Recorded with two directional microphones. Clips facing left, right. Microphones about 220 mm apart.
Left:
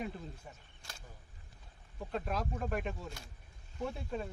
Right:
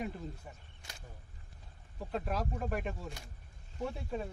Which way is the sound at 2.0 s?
5° right (ahead or behind).